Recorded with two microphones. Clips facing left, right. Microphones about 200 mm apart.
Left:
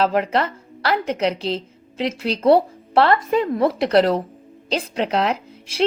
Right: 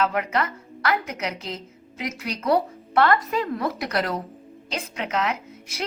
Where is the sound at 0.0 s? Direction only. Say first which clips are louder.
Left 5 dB; 30° left (ahead or behind).